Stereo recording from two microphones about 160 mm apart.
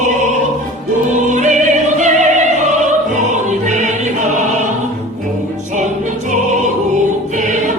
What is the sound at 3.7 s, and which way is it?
Music, 50° right (ahead or behind).